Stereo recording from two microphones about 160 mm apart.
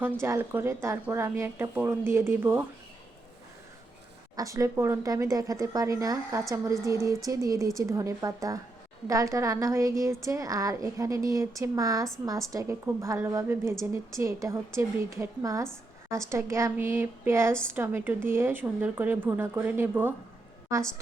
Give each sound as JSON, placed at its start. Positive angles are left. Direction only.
{"t": 0.0, "sound": "a woman's voice", "side_deg": -15}
{"t": 4.4, "sound": "a woman's voice", "side_deg": -20}